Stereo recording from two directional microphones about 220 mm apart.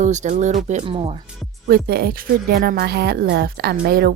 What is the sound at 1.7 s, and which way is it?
Speech, 45° right (ahead or behind).